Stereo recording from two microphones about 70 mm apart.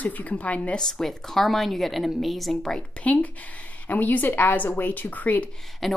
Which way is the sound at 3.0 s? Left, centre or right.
Centre.